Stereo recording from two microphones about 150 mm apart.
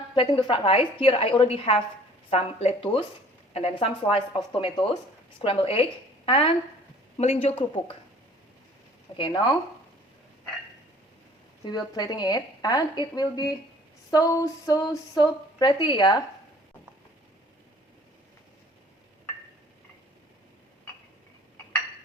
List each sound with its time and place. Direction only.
0.1 s a woman's voice: 30° left (ahead or behind)
9.1 s a woman's voice: 30° left (ahead or behind)
11.6 s a woman's voice: 25° left (ahead or behind)